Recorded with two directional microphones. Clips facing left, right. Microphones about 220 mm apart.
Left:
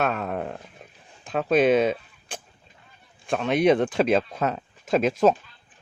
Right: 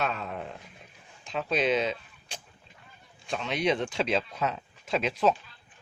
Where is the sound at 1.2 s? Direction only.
55° left (ahead or behind).